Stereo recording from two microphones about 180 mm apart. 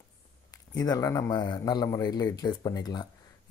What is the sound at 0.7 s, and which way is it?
A man's voice, 20° left (ahead or behind).